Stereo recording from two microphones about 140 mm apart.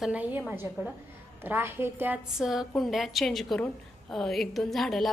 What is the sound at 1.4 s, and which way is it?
A woman's voice, 15° right (ahead or behind).